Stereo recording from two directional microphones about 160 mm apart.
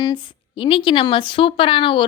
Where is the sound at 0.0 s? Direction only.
30° left (ahead or behind).